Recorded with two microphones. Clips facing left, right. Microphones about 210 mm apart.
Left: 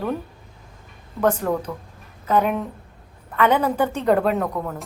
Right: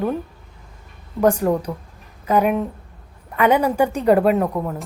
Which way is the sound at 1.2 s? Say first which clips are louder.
Right 4 dB; 10° right (ahead or behind).